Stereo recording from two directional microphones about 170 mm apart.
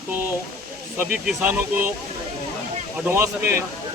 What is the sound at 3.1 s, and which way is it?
Speech, 15° right (ahead or behind).